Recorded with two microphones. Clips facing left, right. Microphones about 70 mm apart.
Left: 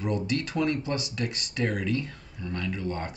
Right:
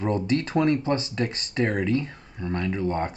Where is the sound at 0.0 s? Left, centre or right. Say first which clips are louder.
Right 4 dB; right.